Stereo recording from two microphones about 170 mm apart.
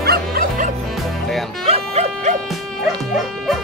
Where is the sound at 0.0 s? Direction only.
65° right (ahead or behind).